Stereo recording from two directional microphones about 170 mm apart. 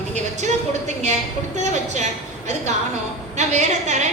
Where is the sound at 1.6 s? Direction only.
45° right (ahead or behind).